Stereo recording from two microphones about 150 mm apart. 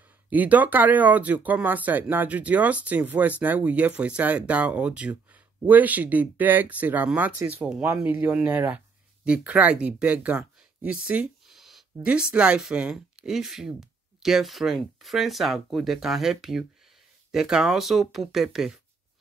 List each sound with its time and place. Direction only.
0.3 s speech: 10° right (ahead or behind)